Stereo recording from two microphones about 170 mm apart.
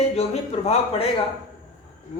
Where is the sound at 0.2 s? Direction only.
35° left (ahead or behind).